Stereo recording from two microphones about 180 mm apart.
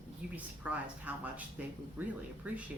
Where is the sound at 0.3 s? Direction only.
10° right (ahead or behind).